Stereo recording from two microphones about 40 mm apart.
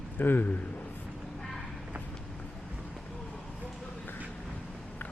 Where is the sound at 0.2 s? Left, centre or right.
Left.